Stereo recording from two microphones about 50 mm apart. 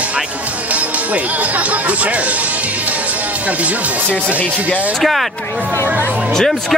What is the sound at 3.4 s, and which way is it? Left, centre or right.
Speech, right.